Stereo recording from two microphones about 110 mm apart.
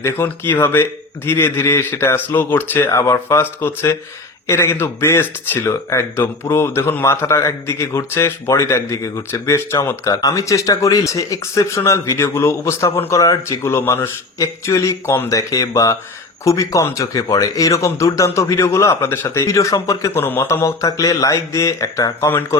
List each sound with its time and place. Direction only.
0.0 s speech: 20° left (ahead or behind)